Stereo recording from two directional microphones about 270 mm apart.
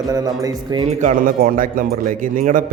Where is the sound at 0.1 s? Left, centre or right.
Centre.